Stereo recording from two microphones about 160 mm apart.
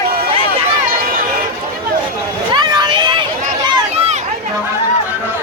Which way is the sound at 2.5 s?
30° right (ahead or behind).